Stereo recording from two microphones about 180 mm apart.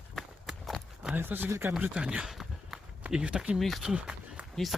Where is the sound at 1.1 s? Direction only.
10° right (ahead or behind).